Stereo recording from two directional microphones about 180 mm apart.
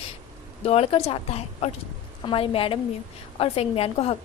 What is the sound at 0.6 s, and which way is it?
A woman's voice, 35° left (ahead or behind).